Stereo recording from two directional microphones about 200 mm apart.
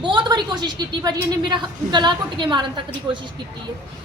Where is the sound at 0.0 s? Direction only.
25° right (ahead or behind).